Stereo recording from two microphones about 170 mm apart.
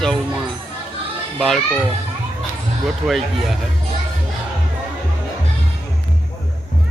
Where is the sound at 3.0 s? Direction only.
Centre (ahead or behind).